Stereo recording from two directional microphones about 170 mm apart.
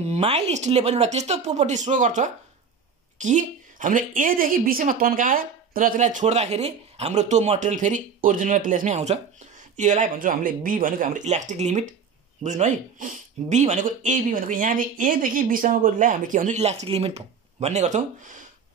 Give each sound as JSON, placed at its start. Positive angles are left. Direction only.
{"t": 0.0, "sound": "speech", "side_deg": -35}